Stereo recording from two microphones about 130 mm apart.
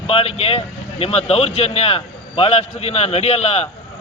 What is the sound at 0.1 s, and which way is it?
A man's voice, 50° left (ahead or behind).